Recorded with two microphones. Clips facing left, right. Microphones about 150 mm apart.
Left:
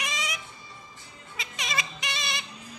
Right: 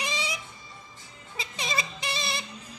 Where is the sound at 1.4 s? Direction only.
30° right (ahead or behind).